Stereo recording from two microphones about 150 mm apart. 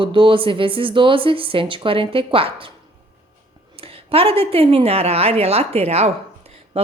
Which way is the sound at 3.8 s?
40° right (ahead or behind).